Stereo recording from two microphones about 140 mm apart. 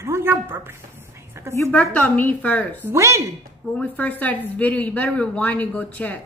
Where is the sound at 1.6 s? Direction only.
10° left (ahead or behind).